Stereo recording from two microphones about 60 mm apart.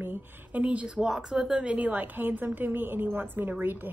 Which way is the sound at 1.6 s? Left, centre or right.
Right.